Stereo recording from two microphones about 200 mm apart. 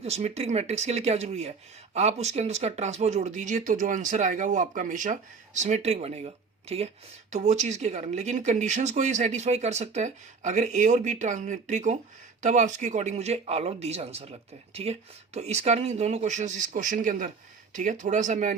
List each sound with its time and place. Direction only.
0.0 s speech: 30° right (ahead or behind)